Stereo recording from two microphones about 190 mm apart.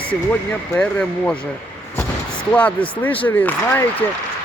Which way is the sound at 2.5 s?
5° left (ahead or behind).